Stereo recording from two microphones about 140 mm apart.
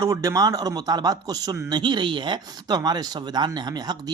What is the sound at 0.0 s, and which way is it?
Speech, 25° right (ahead or behind).